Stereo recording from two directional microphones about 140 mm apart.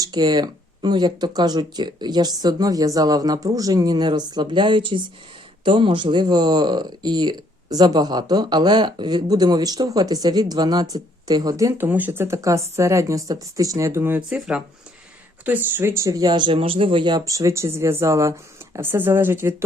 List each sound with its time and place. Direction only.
0.0 s speech: 30° right (ahead or behind)